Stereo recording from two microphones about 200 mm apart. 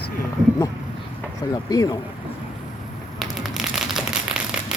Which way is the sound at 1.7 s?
20° left (ahead or behind).